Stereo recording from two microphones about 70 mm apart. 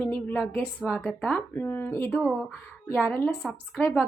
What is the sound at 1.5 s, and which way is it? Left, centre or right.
Speech, left.